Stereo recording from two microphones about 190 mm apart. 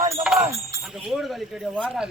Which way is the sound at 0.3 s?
5° right (ahead or behind).